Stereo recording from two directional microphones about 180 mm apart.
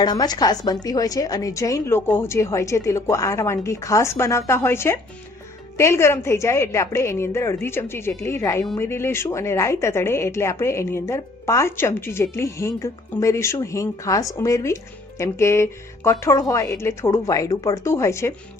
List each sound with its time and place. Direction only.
0.0 s a woman's voice: 20° left (ahead or behind)